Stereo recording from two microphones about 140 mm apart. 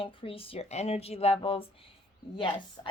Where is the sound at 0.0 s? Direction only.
40° left (ahead or behind).